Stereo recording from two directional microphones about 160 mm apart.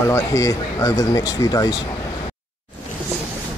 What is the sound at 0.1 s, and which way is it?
Speech, 20° left (ahead or behind).